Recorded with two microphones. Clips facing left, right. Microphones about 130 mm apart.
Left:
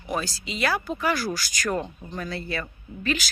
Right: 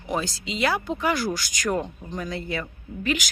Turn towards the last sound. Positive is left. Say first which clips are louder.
# right 1 dB
turn(degrees=-15)  # may be behind; listen again after turning